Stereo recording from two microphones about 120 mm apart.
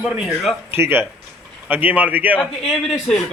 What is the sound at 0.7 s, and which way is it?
A man's voice, 20° right (ahead or behind).